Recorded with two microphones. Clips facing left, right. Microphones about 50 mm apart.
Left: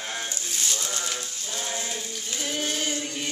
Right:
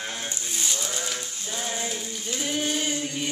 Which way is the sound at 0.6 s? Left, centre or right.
Centre.